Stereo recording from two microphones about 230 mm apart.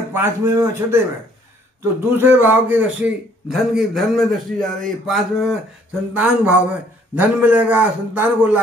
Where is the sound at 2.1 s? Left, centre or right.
Centre.